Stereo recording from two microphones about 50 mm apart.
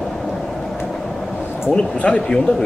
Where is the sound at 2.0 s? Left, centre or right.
Centre.